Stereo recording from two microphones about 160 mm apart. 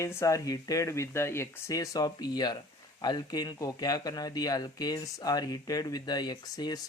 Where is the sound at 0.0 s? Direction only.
15° left (ahead or behind).